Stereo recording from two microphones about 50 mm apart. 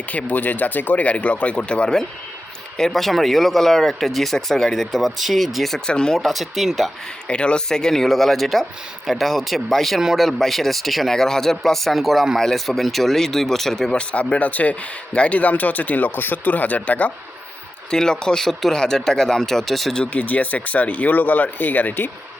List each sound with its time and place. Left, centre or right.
0.1 s speech: left; by 2.0 s centre
2.7 s speech: centre
5.8 s speech: centre
6.2 s speech: centre
7.3 s speech: left
14.0 s speech: left
17.9 s speech: centre
20.1 s speech: left